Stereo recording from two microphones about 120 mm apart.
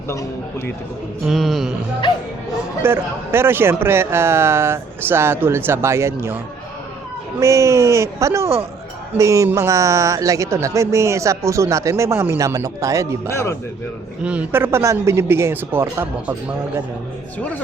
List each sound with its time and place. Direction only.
0.1 s speech: 25° left (ahead or behind)
1.3 s music: centre (ahead or behind)
2.8 s speech: 20° right (ahead or behind)
13.3 s speech: 25° left (ahead or behind)
14.3 s speech: 15° right (ahead or behind)